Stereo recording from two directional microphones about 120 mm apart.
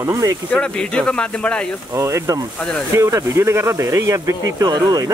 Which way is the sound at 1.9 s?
25° right (ahead or behind).